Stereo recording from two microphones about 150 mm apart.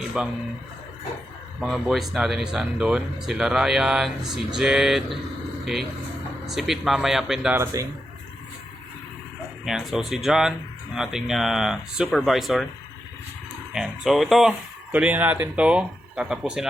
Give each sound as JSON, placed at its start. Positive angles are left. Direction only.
{"t": 0.1, "sound": "speech", "side_deg": -5}
{"t": 1.6, "sound": "speech", "side_deg": 0}
{"t": 6.4, "sound": "speech", "side_deg": 0}
{"t": 7.5, "sound": "speech", "side_deg": -20}
{"t": 9.6, "sound": "speech", "side_deg": 0}
{"t": 13.7, "sound": "speech", "side_deg": 0}